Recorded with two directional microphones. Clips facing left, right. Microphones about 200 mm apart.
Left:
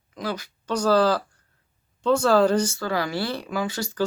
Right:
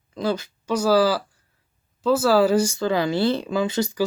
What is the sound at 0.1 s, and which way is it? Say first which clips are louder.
Speech: right 6 dB; 30° right (ahead or behind).